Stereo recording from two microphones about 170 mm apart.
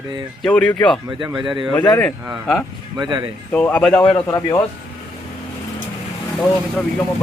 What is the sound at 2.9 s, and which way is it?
Speech, 25° right (ahead or behind).